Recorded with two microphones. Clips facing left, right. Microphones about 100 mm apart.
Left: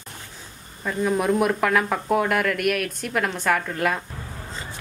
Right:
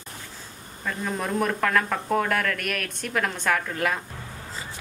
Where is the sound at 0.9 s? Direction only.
10° left (ahead or behind).